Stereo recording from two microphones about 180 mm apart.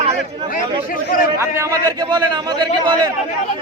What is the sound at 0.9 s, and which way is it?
Speech, 50° left (ahead or behind).